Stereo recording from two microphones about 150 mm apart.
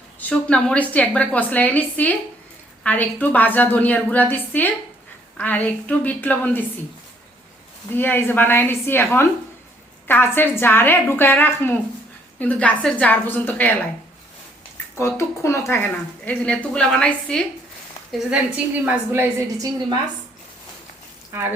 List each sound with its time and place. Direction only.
0.2 s speech: 10° left (ahead or behind)
7.9 s speech: 15° left (ahead or behind)
14.9 s speech: 20° left (ahead or behind)
18.1 s a woman's voice: 5° right (ahead or behind)
21.3 s a woman's voice: 15° right (ahead or behind)